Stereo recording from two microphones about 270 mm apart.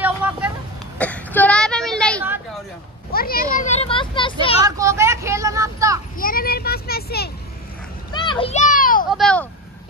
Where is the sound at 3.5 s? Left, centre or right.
Left.